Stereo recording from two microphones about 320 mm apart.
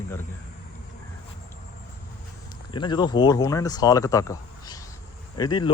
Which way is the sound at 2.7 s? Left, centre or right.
Centre.